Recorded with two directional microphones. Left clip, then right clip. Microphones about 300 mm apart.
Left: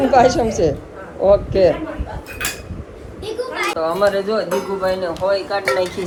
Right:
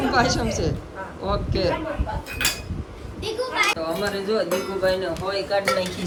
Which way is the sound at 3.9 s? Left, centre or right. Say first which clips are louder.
Left 8 dB; centre.